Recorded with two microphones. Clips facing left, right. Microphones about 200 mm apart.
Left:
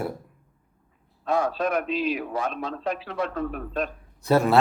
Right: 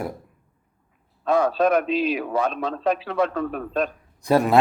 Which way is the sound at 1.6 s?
90° right.